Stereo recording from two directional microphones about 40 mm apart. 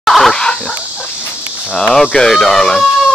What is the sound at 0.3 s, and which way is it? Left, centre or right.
Dog, centre.